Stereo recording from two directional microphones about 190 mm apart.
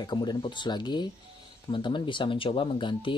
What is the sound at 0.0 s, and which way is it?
Speech, 20° left (ahead or behind).